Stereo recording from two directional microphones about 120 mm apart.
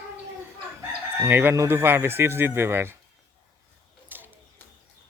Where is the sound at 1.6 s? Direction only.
20° right (ahead or behind).